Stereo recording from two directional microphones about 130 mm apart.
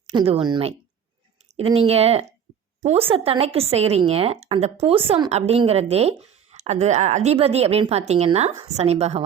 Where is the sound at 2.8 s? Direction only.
50° right (ahead or behind).